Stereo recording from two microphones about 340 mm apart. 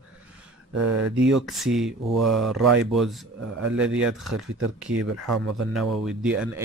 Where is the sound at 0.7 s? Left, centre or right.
Right.